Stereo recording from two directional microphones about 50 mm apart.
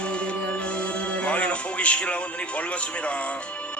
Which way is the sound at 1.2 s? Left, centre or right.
Left.